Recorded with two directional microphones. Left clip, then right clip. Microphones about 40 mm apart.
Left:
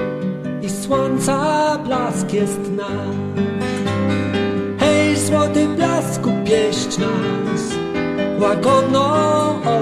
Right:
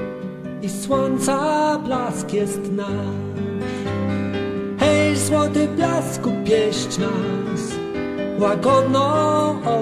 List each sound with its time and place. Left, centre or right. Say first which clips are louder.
0.8 s music: left 2 dB; right
4.7 s music: left 1 dB; right; by 5.7 s centre
5.8 s music: left 2 dB; right
8.2 s music: left 2 dB; centre
8.7 s music: left 2 dB; right
9.1 s music: left 2 dB; centre